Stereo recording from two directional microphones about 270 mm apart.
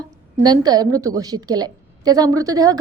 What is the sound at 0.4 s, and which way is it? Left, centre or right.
A woman's voice, centre.